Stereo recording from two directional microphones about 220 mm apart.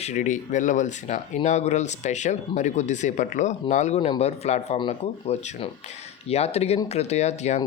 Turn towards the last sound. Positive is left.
turn(degrees=30)  # may be behind; listen again after turning